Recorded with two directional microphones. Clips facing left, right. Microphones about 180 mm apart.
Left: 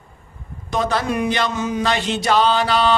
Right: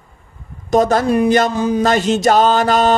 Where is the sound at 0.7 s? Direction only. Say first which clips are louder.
Right 7 dB; 45° right (ahead or behind).